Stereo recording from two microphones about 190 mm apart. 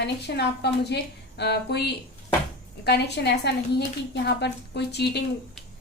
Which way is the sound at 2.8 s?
60° left (ahead or behind).